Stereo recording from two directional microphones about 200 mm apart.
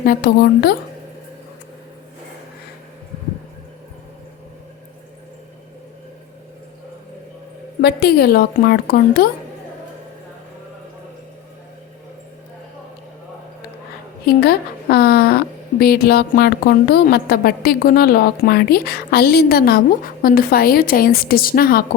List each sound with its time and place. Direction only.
0.0 s a woman's voice: 50° left (ahead or behind)
7.8 s a woman's voice: 50° left (ahead or behind)
14.3 s a woman's voice: 50° left (ahead or behind)